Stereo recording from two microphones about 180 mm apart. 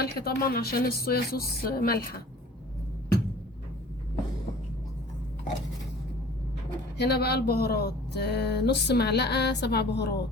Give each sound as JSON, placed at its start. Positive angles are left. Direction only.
{"t": 0.0, "sound": "speech", "side_deg": 60}
{"t": 6.9, "sound": "speech", "side_deg": 65}